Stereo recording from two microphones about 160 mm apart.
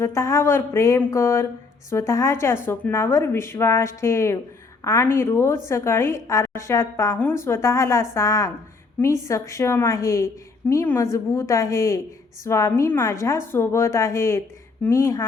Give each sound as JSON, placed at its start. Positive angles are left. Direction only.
{"t": 0.0, "sound": "a woman's voice", "side_deg": 20}